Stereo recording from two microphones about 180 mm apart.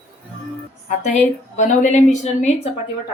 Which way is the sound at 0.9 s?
40° left (ahead or behind).